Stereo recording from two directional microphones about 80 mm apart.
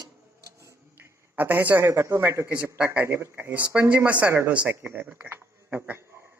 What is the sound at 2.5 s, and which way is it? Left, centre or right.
Speech, centre.